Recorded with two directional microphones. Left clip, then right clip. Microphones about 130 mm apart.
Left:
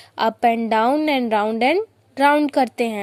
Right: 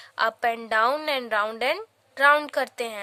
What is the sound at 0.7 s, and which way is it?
A woman's voice, 20° left (ahead or behind).